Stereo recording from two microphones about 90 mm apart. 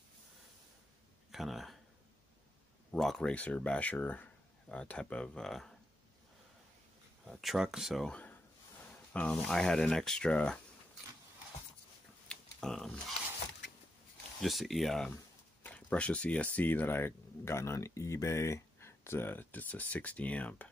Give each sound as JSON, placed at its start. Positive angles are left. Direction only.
{"t": 1.3, "sound": "speech", "side_deg": 0}
{"t": 2.9, "sound": "speech", "side_deg": 5}
{"t": 7.2, "sound": "speech", "side_deg": -5}
{"t": 8.1, "sound": "a sound", "side_deg": 15}
{"t": 9.1, "sound": "speech", "side_deg": 15}
{"t": 12.3, "sound": "a sound", "side_deg": 5}
{"t": 14.4, "sound": "speech", "side_deg": 0}
{"t": 15.6, "sound": "speech", "side_deg": 15}